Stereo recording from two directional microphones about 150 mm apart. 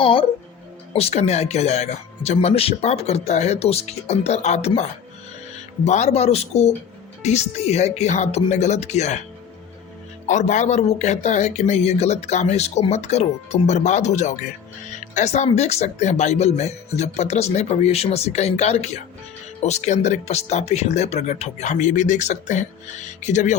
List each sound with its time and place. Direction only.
0.0 s speech: 35° left (ahead or behind)
10.2 s speech: 55° left (ahead or behind)